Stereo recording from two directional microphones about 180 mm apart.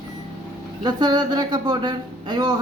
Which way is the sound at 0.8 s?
25° right (ahead or behind).